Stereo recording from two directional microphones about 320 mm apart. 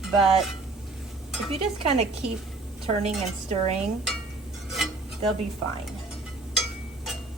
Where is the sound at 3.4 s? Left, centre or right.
Centre.